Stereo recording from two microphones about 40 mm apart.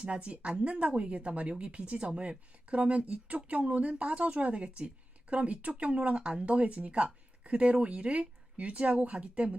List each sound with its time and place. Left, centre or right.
0.0 s a woman's voice: right